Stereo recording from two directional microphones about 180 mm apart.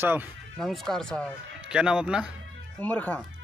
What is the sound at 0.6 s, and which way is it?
Speech, centre (ahead or behind).